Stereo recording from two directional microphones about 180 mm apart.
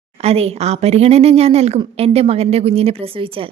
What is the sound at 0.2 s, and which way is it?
A woman's voice, 35° right (ahead or behind).